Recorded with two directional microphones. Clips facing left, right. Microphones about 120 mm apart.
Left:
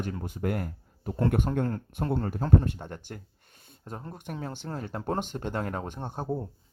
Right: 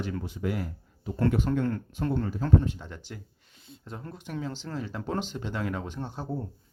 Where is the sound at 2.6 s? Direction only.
50° left (ahead or behind).